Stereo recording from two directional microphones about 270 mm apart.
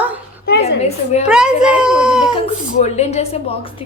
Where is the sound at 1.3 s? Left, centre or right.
Centre.